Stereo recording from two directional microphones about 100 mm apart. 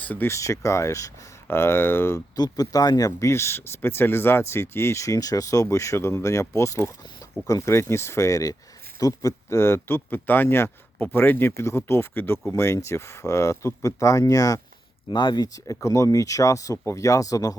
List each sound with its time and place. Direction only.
0.0 s speech: 15° left (ahead or behind)
0.3 s speech: 30° left (ahead or behind)
2.3 s speech: 40° left (ahead or behind)
15.1 s speech: 50° left (ahead or behind)